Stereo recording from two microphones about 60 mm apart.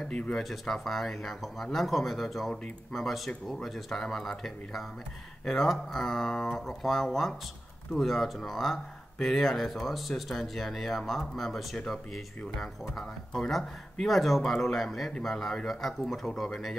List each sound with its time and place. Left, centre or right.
0.0 s speech: centre
0.3 s speech: centre